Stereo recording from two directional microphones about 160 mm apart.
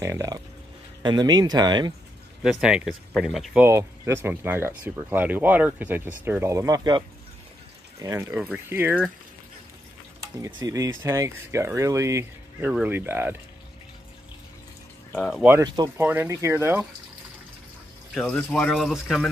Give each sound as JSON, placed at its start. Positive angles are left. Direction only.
{"t": 0.0, "sound": "speech", "side_deg": -20}
{"t": 2.6, "sound": "speech", "side_deg": -5}
{"t": 3.6, "sound": "speech", "side_deg": -15}
{"t": 10.4, "sound": "speech", "side_deg": -20}
{"t": 15.1, "sound": "speech", "side_deg": 0}
{"t": 15.6, "sound": "speech", "side_deg": -25}
{"t": 16.0, "sound": "speech", "side_deg": -15}
{"t": 18.1, "sound": "speech", "side_deg": 0}